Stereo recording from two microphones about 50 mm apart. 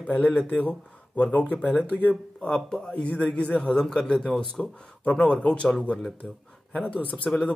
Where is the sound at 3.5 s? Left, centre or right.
Centre.